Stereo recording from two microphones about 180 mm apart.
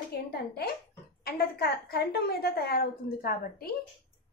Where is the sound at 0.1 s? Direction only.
60° left (ahead or behind).